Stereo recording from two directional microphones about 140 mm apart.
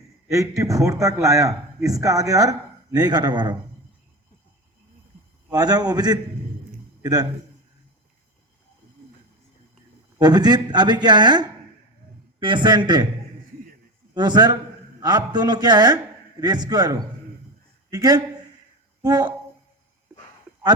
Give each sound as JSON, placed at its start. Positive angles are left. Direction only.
{"t": 0.3, "sound": "a man's voice", "side_deg": -20}
{"t": 5.5, "sound": "a man's voice", "side_deg": -30}
{"t": 10.2, "sound": "speech", "side_deg": -30}
{"t": 14.1, "sound": "a man's voice", "side_deg": -30}